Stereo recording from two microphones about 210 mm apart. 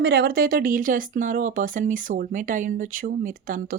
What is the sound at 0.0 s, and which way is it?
Speech, 50° right (ahead or behind).